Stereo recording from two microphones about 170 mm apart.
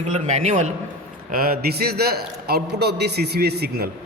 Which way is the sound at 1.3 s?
60° right (ahead or behind).